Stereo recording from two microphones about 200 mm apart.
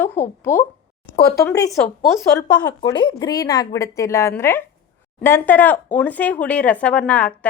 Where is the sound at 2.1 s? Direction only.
15° left (ahead or behind).